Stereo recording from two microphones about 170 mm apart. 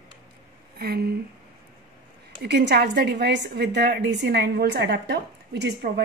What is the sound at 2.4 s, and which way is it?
A woman's voice, 80° right.